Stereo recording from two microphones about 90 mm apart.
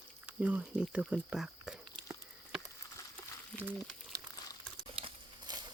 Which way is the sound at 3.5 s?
10° left (ahead or behind).